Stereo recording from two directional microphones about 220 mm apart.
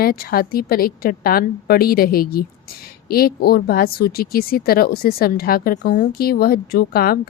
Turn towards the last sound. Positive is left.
turn(degrees=45)  # may be behind; listen again after turning